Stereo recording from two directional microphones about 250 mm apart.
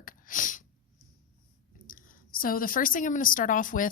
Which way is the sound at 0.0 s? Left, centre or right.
Left.